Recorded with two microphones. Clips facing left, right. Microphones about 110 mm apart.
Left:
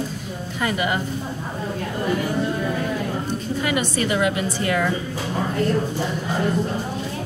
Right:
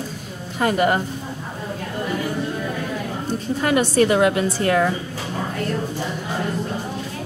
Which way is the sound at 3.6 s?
40° right (ahead or behind).